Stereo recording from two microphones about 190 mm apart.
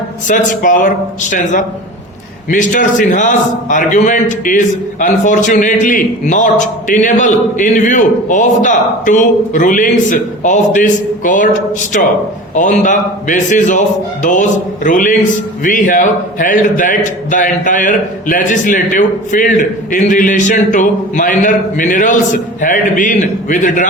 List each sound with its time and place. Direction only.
0.3 s a man's voice: 45° left (ahead or behind)
12.5 s a man's voice: 40° left (ahead or behind)